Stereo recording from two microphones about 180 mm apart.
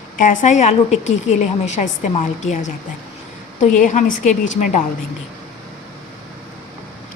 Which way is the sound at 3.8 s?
45° left (ahead or behind).